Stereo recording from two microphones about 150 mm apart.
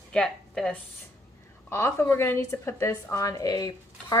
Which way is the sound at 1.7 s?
20° left (ahead or behind).